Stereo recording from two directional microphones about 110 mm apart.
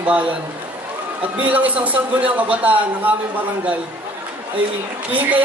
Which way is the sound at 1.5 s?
15° right (ahead or behind).